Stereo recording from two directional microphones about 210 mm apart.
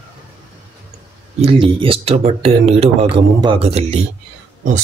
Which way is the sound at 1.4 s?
25° right (ahead or behind).